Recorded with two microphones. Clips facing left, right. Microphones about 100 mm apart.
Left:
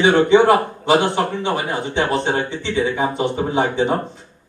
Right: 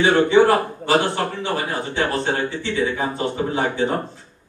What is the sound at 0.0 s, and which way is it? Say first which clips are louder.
A man's voice: left 2 dB; 20° left (ahead or behind).